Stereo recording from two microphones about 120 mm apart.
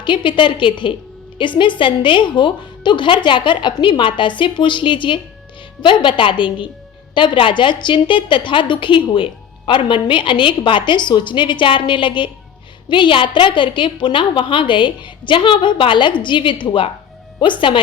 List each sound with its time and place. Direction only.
0.0 s a woman's voice: 45° left (ahead or behind)